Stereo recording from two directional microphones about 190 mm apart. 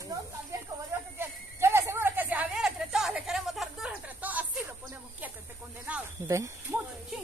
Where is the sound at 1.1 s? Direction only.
10° right (ahead or behind).